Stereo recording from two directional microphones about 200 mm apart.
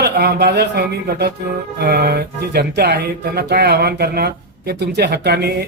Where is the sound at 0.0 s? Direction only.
55° right (ahead or behind).